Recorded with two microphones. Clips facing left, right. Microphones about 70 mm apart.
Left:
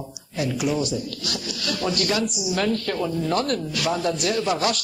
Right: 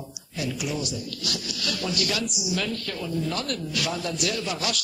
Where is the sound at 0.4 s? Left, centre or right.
Left.